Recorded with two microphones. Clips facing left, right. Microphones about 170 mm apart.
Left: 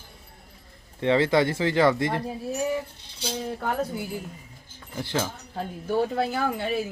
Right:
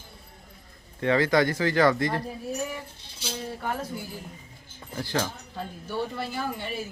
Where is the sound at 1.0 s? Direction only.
25° left (ahead or behind).